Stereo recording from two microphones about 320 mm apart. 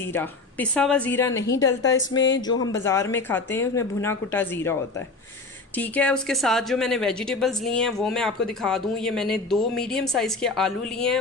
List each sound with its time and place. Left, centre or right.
0.0 s speech: centre
2.1 s speech: left
2.5 s speech: centre